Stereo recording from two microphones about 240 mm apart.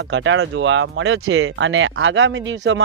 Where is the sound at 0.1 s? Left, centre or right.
Right.